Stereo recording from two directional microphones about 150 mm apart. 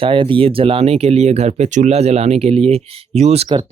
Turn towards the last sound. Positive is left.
turn(degrees=-40)  # may be behind; listen again after turning